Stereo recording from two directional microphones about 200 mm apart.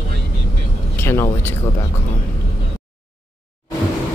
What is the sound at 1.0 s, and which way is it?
Speech, 10° left (ahead or behind).